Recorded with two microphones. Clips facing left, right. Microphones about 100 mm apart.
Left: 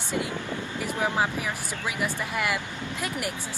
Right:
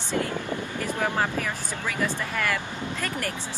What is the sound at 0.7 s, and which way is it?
Speech, 15° left (ahead or behind).